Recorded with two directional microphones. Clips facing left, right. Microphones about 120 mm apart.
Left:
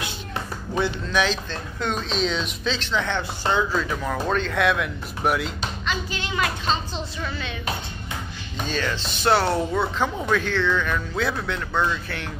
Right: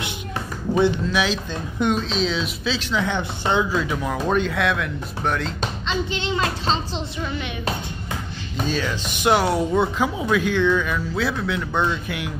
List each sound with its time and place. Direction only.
1.0 s speech: 5° right (ahead or behind)
3.2 s speech: 20° right (ahead or behind); by 5.5 s 10° left (ahead or behind)
5.9 s a child's voice: 25° right (ahead or behind)
8.6 s speech: 5° right (ahead or behind)
11.7 s a child's voice: 20° right (ahead or behind)